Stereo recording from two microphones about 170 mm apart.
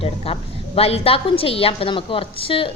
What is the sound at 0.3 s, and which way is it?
A woman's voice, 35° left (ahead or behind).